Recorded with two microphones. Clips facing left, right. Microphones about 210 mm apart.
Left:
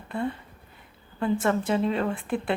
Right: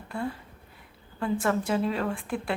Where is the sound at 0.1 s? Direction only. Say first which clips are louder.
Left 3 dB; centre (ahead or behind).